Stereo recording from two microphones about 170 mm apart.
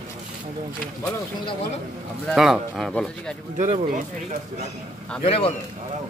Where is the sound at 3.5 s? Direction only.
45° right (ahead or behind).